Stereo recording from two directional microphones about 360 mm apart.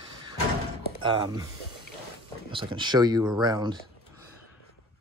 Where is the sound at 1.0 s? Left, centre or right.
Centre.